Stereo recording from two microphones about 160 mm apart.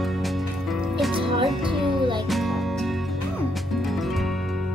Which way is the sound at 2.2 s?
Centre (ahead or behind).